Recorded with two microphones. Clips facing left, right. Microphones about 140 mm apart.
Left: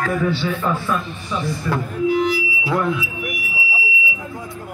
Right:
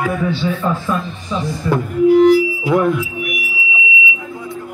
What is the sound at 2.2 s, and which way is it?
Music, 55° right (ahead or behind).